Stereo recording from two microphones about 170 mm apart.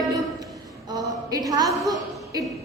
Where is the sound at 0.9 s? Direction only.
20° right (ahead or behind).